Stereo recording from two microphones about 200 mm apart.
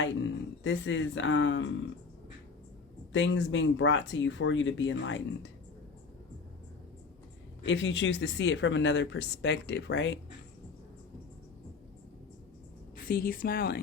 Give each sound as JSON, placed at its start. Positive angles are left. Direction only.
{"t": 0.6, "sound": "speech", "side_deg": 70}
{"t": 3.1, "sound": "speech", "side_deg": 65}
{"t": 7.6, "sound": "speech", "side_deg": 70}
{"t": 13.1, "sound": "speech", "side_deg": 45}